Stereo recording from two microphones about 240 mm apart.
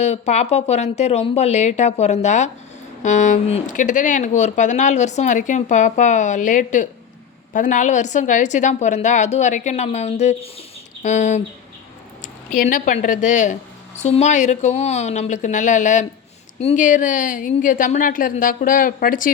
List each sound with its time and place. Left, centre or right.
0.0 s a woman's voice: left
12.5 s speech: left